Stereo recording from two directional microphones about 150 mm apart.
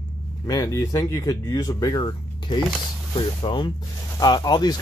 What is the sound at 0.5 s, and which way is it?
Speech, 25° left (ahead or behind).